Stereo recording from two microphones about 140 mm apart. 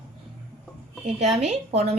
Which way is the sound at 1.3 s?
50° right (ahead or behind).